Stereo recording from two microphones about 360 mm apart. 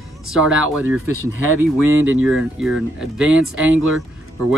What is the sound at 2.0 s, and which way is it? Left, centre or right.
Speech, right.